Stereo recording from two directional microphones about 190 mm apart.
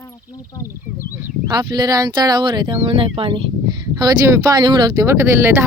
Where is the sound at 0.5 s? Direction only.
15° left (ahead or behind).